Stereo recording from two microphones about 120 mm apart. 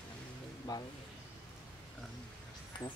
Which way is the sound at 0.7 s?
30° left (ahead or behind).